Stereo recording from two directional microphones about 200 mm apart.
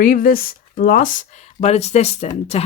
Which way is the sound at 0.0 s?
45° left (ahead or behind).